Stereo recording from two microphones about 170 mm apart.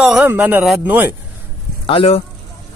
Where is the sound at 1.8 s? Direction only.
35° left (ahead or behind).